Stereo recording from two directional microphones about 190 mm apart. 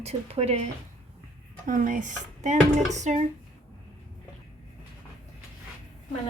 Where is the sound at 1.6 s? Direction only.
45° right (ahead or behind).